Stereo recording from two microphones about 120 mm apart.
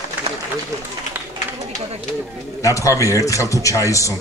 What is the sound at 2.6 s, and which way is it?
Speech, 25° left (ahead or behind).